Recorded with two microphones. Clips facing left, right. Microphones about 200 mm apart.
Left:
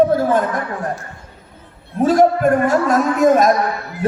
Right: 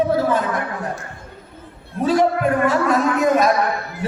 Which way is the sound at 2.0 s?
45° left (ahead or behind).